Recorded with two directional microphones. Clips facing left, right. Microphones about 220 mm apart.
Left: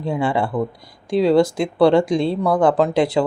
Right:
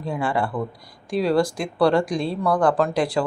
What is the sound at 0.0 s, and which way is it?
Speech, 25° left (ahead or behind).